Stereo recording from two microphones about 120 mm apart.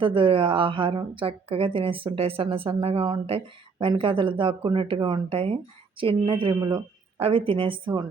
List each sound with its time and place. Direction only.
0.0 s a woman's voice: 45° right (ahead or behind)
6.6 s speech: 30° right (ahead or behind)
7.2 s a woman's voice: 55° right (ahead or behind)